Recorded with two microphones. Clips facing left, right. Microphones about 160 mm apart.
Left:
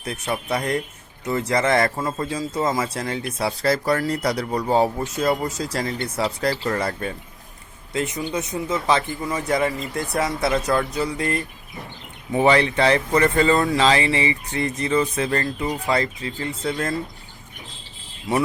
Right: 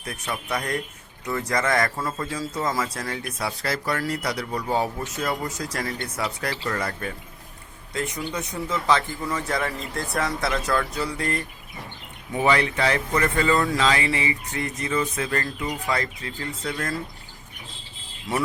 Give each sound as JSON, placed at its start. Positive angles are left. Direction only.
{"t": 0.0, "sound": "speech", "side_deg": 25}
{"t": 12.4, "sound": "speech", "side_deg": 30}